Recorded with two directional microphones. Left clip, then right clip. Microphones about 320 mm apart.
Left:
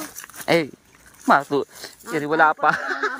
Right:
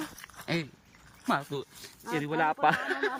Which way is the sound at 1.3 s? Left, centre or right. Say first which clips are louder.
Left 13 dB; left.